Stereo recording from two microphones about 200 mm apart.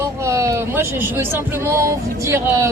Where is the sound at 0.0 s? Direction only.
15° right (ahead or behind).